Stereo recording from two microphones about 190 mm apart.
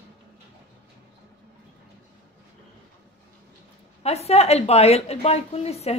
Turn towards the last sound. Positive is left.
turn(degrees=35)  # may be behind; listen again after turning